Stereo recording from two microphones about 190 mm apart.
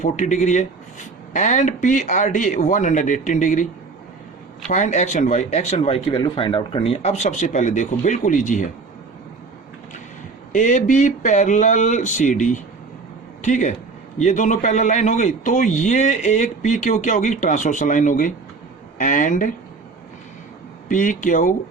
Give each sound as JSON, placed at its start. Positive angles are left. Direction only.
{"t": 0.0, "sound": "a man's voice", "side_deg": 40}
{"t": 4.7, "sound": "a man's voice", "side_deg": 40}
{"t": 10.5, "sound": "a man's voice", "side_deg": 40}
{"t": 20.8, "sound": "speech", "side_deg": 45}